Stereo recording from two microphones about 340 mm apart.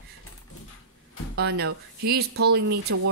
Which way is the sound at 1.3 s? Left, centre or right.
Right.